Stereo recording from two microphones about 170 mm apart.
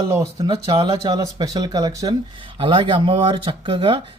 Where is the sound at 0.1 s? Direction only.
20° right (ahead or behind).